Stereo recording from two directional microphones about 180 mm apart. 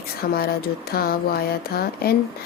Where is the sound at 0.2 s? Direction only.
60° left (ahead or behind).